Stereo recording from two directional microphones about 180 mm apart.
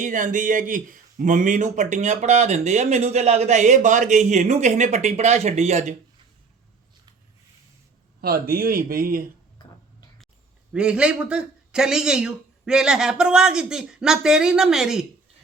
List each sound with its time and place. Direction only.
0.0 s speech: 45° right (ahead or behind)
8.2 s speech: 55° right (ahead or behind)
10.7 s speech: 5° right (ahead or behind)